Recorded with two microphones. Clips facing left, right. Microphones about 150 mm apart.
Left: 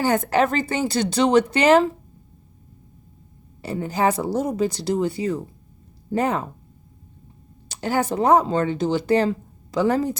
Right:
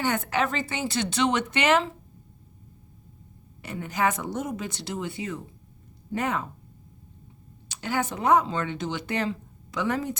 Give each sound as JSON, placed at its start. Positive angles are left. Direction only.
{"t": 0.0, "sound": "speech", "side_deg": 35}
{"t": 3.6, "sound": "speech", "side_deg": 35}
{"t": 7.7, "sound": "speech", "side_deg": 40}